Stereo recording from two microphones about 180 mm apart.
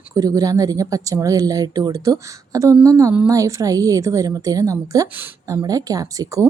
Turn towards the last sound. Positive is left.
turn(degrees=-20)  # may be behind; listen again after turning